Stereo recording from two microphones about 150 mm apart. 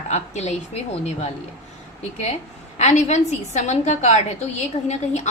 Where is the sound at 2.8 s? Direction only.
50° left (ahead or behind).